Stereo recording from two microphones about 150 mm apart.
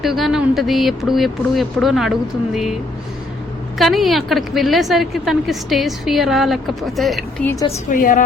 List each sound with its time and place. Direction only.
0.0 s a woman's voice: centre (ahead or behind)
3.8 s a woman's voice: centre (ahead or behind)
7.4 s a woman's voice: 20° left (ahead or behind)
7.9 s a woman's voice: 65° left (ahead or behind)